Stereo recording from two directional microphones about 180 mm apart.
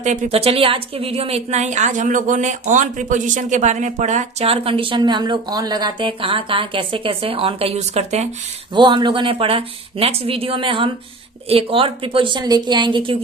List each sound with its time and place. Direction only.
0.0 s a woman's voice: 40° right (ahead or behind)
8.7 s speech: 25° right (ahead or behind)